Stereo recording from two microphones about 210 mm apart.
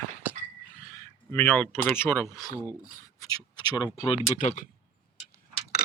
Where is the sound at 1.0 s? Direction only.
10° left (ahead or behind); by 4.2 s 25° left (ahead or behind).